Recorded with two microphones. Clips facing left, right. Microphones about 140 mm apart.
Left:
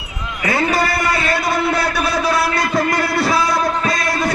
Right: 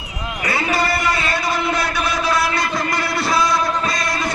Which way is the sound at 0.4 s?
50° left (ahead or behind).